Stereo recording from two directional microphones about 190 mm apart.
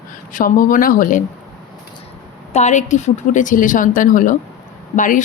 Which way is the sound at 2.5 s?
35° left (ahead or behind).